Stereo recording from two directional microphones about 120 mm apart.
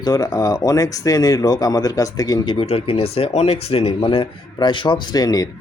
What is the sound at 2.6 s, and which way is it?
Speech, 55° left (ahead or behind).